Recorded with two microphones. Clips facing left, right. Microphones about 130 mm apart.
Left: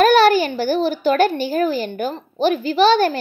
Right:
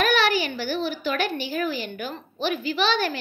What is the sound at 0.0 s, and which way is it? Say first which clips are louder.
Speech: left 9 dB; 40° left (ahead or behind).